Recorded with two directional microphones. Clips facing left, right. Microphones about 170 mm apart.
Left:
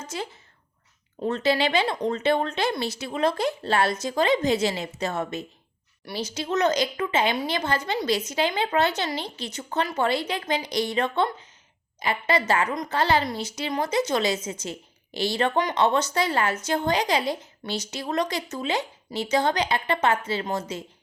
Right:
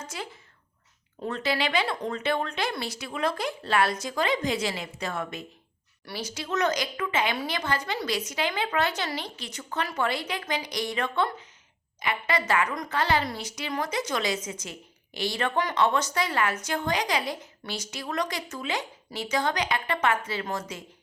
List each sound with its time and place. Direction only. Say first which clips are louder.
0.1 s a woman's voice: left 5 dB; 25° left (ahead or behind)